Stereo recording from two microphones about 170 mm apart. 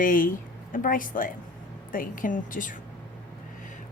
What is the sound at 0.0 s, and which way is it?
A woman's voice, 55° left (ahead or behind).